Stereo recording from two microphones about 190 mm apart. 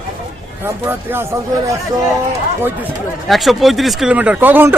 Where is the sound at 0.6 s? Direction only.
10° right (ahead or behind).